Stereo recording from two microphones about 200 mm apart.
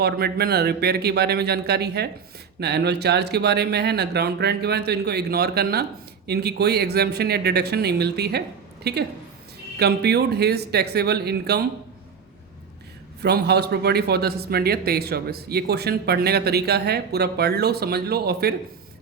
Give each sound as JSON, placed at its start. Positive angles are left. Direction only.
{"t": 0.0, "sound": "speech", "side_deg": -50}
{"t": 13.2, "sound": "speech", "side_deg": -55}